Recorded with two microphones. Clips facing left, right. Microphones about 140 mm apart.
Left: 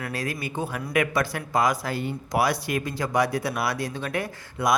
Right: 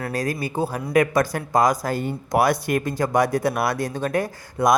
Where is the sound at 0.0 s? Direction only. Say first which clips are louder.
Right 5 dB; 40° right (ahead or behind).